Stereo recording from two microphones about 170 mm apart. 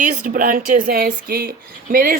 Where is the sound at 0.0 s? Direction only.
50° right (ahead or behind).